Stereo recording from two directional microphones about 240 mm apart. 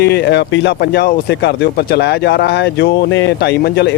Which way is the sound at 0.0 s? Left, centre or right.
Left.